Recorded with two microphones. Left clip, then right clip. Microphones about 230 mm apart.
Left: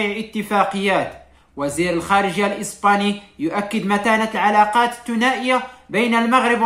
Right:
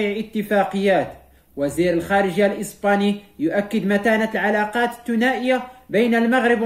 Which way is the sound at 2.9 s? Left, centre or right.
Centre.